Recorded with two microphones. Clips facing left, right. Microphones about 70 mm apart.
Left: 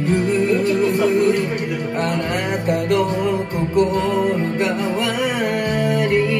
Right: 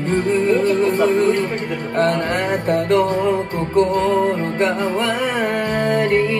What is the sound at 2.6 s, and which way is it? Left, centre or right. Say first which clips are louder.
Music: right 2 dB; centre.